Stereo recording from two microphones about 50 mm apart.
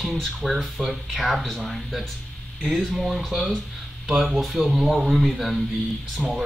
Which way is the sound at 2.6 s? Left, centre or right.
Right.